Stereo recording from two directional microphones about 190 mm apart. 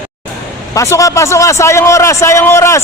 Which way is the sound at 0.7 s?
15° left (ahead or behind).